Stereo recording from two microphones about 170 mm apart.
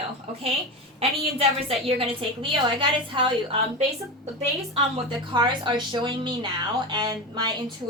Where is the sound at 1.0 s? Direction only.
35° right (ahead or behind).